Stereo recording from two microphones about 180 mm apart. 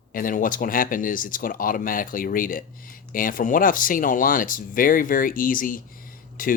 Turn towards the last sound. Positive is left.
turn(degrees=50)  # may be behind; listen again after turning